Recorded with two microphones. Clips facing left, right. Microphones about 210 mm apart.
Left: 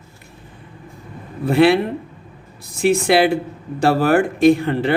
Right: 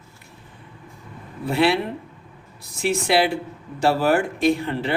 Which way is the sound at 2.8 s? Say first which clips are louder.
Left 5 dB; 50° left (ahead or behind).